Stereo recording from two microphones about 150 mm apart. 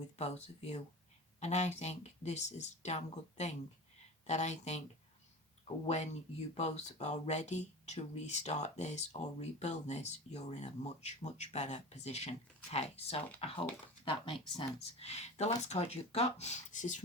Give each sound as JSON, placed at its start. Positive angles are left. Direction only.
{"t": 0.2, "sound": "speech", "side_deg": 50}
{"t": 6.5, "sound": "speech", "side_deg": 50}